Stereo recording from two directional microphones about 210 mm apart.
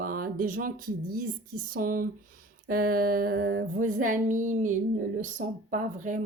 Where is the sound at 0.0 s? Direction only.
40° right (ahead or behind).